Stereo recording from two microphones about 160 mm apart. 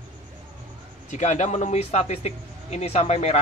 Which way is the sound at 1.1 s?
50° left (ahead or behind).